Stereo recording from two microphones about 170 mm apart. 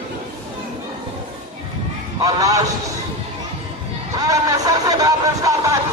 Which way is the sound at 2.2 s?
20° right (ahead or behind).